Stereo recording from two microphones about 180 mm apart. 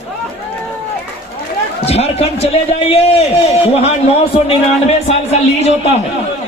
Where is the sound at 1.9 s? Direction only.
35° left (ahead or behind).